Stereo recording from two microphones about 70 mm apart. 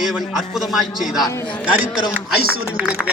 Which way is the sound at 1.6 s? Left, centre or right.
Right.